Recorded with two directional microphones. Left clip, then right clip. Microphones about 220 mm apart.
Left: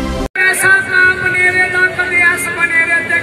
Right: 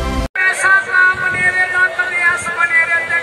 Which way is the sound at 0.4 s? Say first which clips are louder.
Left 2 dB; 50° left (ahead or behind).